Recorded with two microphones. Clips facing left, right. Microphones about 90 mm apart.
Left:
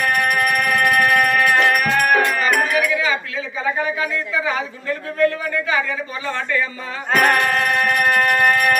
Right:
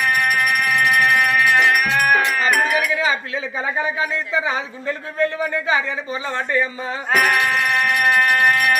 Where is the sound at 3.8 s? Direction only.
20° right (ahead or behind).